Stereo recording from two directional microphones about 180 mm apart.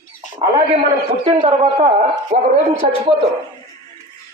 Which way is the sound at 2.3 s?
65° right (ahead or behind).